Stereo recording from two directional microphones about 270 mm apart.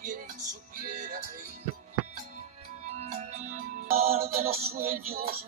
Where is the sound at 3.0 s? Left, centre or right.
Right.